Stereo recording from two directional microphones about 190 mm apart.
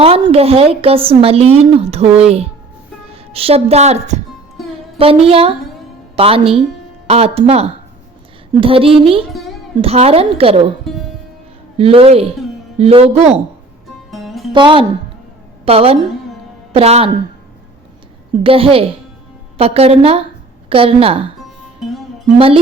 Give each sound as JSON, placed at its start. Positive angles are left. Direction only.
{"t": 0.0, "sound": "speech", "side_deg": -30}
{"t": 3.1, "sound": "music", "side_deg": -30}
{"t": 4.9, "sound": "a woman's voice", "side_deg": -30}
{"t": 10.9, "sound": "music", "side_deg": 0}
{"t": 11.8, "sound": "a woman's voice", "side_deg": -30}
{"t": 14.1, "sound": "music", "side_deg": 0}
{"t": 14.5, "sound": "a woman's voice", "side_deg": -25}
{"t": 18.4, "sound": "a woman's voice", "side_deg": -30}
{"t": 22.4, "sound": "a woman's voice", "side_deg": -30}